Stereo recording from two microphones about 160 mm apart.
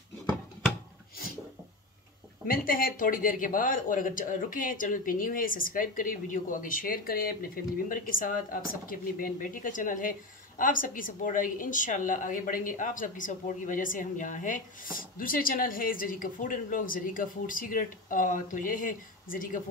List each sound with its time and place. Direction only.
2.4 s a woman's voice: 65° left (ahead or behind)